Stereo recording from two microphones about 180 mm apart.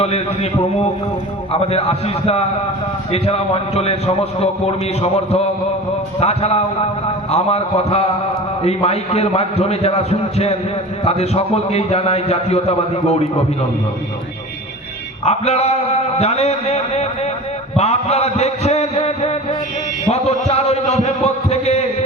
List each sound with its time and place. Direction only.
1.5 s a man's voice: 35° left (ahead or behind)
15.2 s a man's voice: 35° left (ahead or behind)
17.7 s a sound: 35° left (ahead or behind)